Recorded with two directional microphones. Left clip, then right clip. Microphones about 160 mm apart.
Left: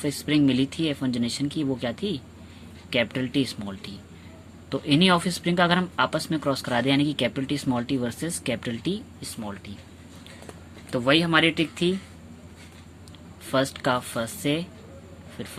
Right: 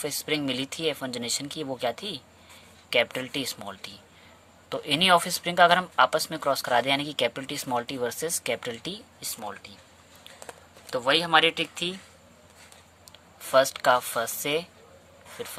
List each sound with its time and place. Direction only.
0.0 s speech: 50° right (ahead or behind)
10.9 s speech: 30° right (ahead or behind)
13.4 s speech: 45° right (ahead or behind)